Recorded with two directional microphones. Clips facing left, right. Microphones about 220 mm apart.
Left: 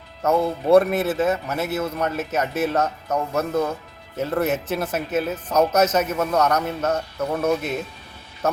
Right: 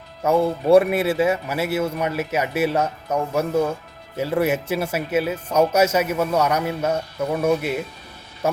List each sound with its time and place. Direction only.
0.2 s speech: 10° right (ahead or behind)